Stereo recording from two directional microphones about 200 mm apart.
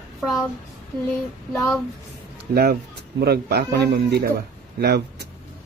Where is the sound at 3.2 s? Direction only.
50° right (ahead or behind).